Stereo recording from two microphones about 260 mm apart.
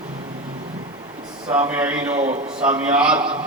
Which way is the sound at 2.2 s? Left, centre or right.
Right.